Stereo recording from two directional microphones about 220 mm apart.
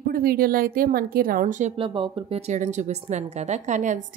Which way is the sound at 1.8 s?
25° right (ahead or behind).